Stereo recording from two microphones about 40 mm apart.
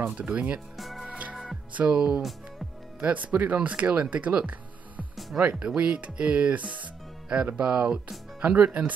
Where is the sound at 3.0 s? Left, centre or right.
Right.